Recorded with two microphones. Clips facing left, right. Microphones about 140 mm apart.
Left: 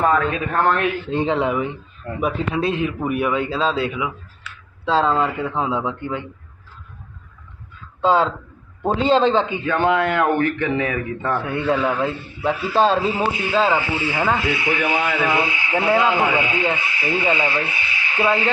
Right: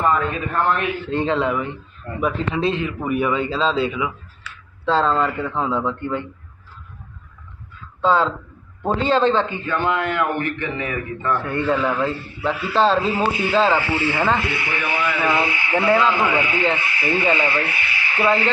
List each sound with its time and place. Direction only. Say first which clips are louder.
0.0 s a man's voice: left 2 dB; 90° left
1.0 s speech: right 3 dB; 15° left (ahead or behind)
8.0 s speech: left 1 dB; 10° left (ahead or behind)
9.6 s a man's voice: left 3 dB; 70° left (ahead or behind)
11.4 s speech: left 1 dB; 10° left (ahead or behind)